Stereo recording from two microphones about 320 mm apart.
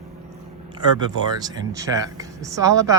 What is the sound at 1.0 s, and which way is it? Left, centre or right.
Speech, centre.